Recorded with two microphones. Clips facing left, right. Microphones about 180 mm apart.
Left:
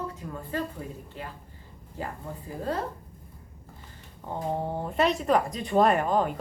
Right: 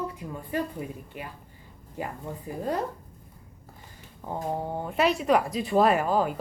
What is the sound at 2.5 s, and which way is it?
Speech, 15° right (ahead or behind).